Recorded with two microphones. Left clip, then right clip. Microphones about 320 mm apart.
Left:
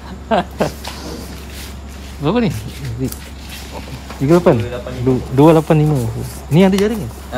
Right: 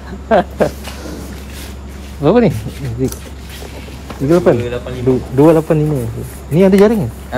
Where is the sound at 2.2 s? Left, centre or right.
Centre.